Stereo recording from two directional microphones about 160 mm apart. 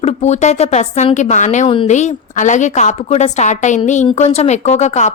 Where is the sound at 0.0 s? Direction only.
45° left (ahead or behind).